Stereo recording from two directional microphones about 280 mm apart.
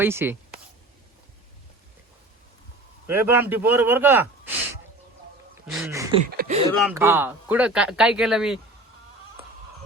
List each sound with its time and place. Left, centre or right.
0.0 s speech: centre
3.2 s speech: centre
6.2 s speech: right
6.7 s speech: centre